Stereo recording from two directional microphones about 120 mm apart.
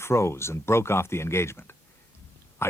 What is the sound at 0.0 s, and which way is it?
Speech, 20° left (ahead or behind).